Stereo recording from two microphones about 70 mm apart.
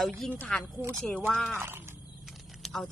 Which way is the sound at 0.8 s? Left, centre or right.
Right.